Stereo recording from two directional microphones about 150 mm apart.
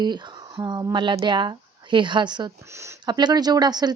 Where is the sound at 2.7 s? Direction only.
20° right (ahead or behind).